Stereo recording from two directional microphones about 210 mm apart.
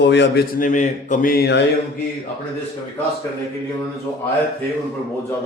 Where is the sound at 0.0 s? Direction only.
55° left (ahead or behind).